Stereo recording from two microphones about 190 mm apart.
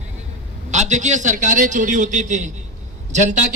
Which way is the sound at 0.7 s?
40° right (ahead or behind).